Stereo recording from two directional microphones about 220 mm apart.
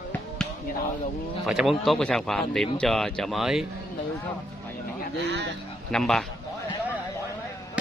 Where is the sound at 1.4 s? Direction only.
Centre (ahead or behind).